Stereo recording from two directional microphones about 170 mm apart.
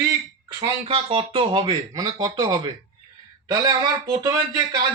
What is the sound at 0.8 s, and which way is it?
Speech, 35° right (ahead or behind).